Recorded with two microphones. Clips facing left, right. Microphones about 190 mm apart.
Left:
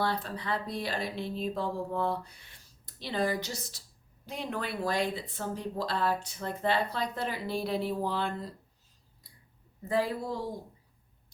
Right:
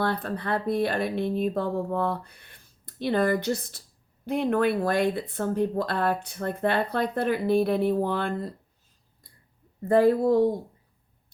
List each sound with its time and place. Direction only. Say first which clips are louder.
0.0 s speech: right 4 dB; 55° right (ahead or behind)
9.9 s speech: right 11 dB; 55° right (ahead or behind)